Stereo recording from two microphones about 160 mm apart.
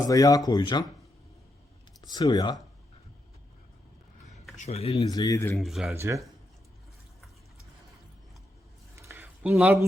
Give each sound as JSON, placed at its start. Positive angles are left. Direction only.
{"t": 0.1, "sound": "speech", "side_deg": 20}
{"t": 2.0, "sound": "speech", "side_deg": 25}
{"t": 4.5, "sound": "speech", "side_deg": 45}
{"t": 4.9, "sound": "speech", "side_deg": 20}
{"t": 5.5, "sound": "speech", "side_deg": 0}
{"t": 5.9, "sound": "speech", "side_deg": -15}
{"t": 9.0, "sound": "a sound", "side_deg": -15}
{"t": 9.5, "sound": "speech", "side_deg": -5}